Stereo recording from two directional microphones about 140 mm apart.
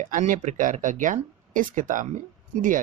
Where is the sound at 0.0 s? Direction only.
65° right (ahead or behind).